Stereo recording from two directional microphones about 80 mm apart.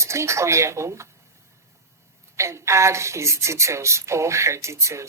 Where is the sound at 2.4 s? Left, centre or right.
Right.